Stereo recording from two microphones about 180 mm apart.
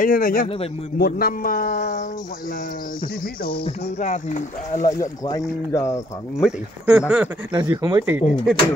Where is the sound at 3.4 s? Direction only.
30° left (ahead or behind).